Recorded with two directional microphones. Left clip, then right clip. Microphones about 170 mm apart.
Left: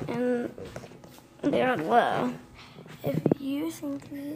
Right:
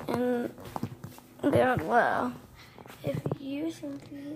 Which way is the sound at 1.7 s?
10° left (ahead or behind).